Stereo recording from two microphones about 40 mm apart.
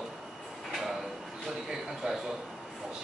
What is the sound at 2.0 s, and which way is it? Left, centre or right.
Speech, right.